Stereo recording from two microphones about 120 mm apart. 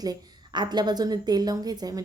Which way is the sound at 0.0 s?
35° right (ahead or behind).